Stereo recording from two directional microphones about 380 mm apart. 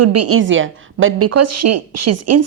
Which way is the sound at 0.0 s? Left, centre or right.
Right.